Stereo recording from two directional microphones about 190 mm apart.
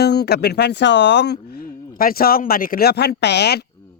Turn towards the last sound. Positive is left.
turn(degrees=60)  # may be behind; listen again after turning